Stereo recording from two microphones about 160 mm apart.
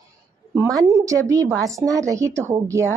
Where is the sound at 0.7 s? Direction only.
20° right (ahead or behind).